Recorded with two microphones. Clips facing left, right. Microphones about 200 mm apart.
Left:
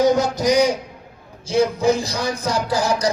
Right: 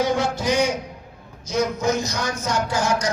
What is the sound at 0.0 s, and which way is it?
A man's voice, 40° left (ahead or behind).